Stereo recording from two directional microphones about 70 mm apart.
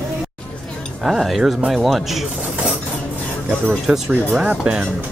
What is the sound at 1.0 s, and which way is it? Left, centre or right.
Speech, centre.